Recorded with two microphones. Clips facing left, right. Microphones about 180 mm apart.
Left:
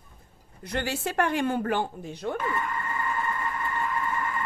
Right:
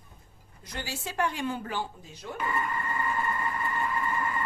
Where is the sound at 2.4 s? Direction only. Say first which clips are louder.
Left 1 dB; 5° right (ahead or behind).